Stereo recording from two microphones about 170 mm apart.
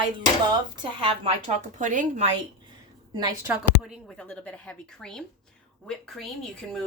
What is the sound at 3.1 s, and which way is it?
Speech, 25° right (ahead or behind).